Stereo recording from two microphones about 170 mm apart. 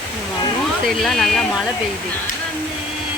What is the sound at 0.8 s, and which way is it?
Speech, centre (ahead or behind).